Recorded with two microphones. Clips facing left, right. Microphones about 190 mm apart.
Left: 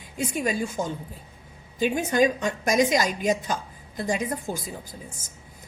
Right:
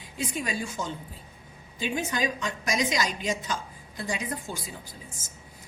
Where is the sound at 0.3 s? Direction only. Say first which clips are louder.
Left 6 dB; 50° left (ahead or behind).